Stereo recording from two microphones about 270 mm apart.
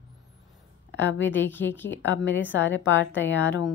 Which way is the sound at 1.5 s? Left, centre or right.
Centre.